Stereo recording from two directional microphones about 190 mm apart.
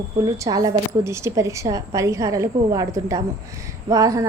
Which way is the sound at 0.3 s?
20° right (ahead or behind).